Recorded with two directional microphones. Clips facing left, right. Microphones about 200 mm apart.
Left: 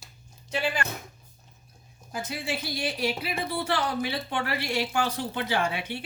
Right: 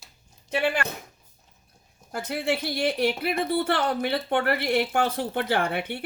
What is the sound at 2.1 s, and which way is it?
Speech, 60° right (ahead or behind).